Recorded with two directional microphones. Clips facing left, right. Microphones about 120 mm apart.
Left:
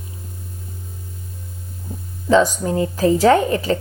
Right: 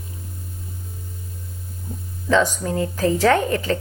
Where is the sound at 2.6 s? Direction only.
20° left (ahead or behind).